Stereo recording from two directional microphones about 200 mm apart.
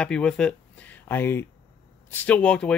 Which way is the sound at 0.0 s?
5° left (ahead or behind).